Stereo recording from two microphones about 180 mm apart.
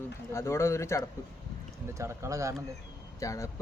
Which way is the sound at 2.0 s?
15° right (ahead or behind).